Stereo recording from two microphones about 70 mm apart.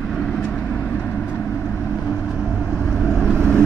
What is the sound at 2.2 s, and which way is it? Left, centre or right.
Vehicle, centre.